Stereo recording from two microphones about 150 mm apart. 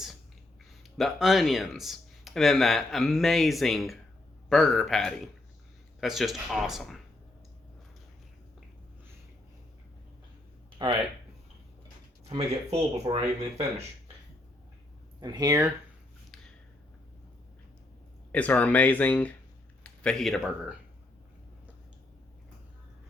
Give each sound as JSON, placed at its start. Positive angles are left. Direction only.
{"t": 0.9, "sound": "speech", "side_deg": 0}
{"t": 10.8, "sound": "speech", "side_deg": -30}
{"t": 12.3, "sound": "speech", "side_deg": -35}
{"t": 15.2, "sound": "speech", "side_deg": -25}
{"t": 18.3, "sound": "speech", "side_deg": 10}